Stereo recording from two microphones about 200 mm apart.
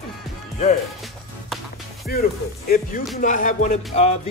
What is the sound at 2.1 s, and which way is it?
Speech, 45° left (ahead or behind).